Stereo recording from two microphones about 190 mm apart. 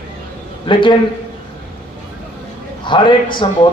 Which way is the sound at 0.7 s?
25° left (ahead or behind).